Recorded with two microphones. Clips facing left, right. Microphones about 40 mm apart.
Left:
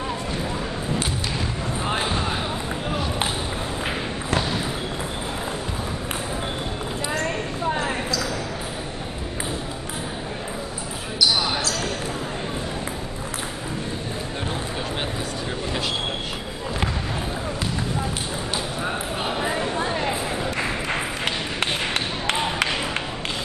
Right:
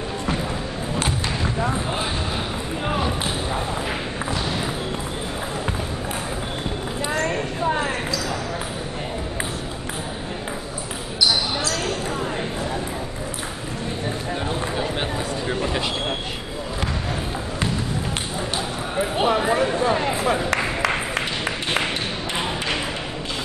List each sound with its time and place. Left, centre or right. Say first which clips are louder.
7.2 s clip-clop: right 2 dB; centre
20.2 s ping: right 4 dB; right